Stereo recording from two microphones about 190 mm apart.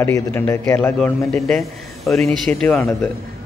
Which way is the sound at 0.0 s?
10° left (ahead or behind).